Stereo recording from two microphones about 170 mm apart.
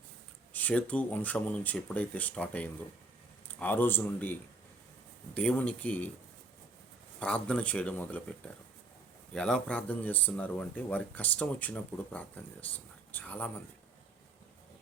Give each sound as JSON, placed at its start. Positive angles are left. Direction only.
{"t": 0.5, "sound": "speech", "side_deg": 10}
{"t": 7.2, "sound": "speech", "side_deg": 5}
{"t": 9.3, "sound": "speech", "side_deg": 5}